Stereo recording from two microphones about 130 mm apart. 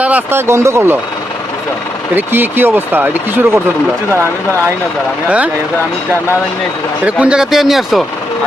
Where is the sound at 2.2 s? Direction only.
15° right (ahead or behind).